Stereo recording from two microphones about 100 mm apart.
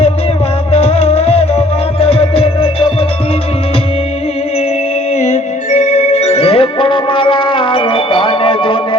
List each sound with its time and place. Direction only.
0.7 s music: 90° left; by 2.6 s 75° left (ahead or behind)
6.0 s music: 90° left; by 9.0 s 60° left (ahead or behind)